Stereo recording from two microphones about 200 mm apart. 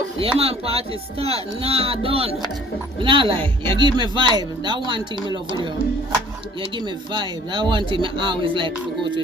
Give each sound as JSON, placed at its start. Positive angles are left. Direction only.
{"t": 0.2, "sound": "speech", "side_deg": -30}
{"t": 7.1, "sound": "speech", "side_deg": -25}